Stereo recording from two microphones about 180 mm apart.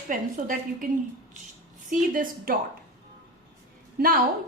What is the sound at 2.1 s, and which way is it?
Speech, 50° right (ahead or behind).